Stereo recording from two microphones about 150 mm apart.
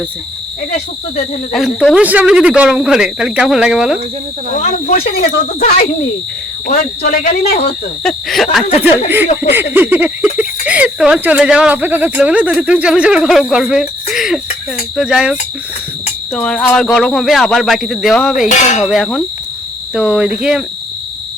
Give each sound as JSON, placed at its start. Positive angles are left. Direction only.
{"t": 1.5, "sound": "speech", "side_deg": 0}
{"t": 4.6, "sound": "speech", "side_deg": 50}
{"t": 5.5, "sound": "insect", "side_deg": 55}
{"t": 6.7, "sound": "speech", "side_deg": 70}
{"t": 8.0, "sound": "speech", "side_deg": 0}
{"t": 8.8, "sound": "speech", "side_deg": -10}
{"t": 16.3, "sound": "speech", "side_deg": 5}
{"t": 18.4, "sound": "speech", "side_deg": 55}
{"t": 18.8, "sound": "speech", "side_deg": 0}